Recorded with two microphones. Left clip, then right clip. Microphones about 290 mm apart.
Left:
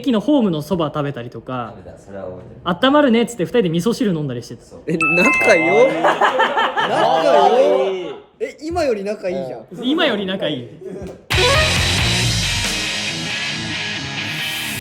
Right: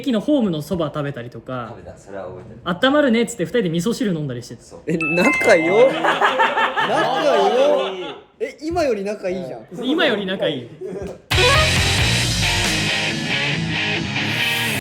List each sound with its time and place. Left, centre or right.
0.0 s speech: centre
2.6 s speech: centre
6.0 s a sound: left
7.2 s speech: centre
11.3 s music: centre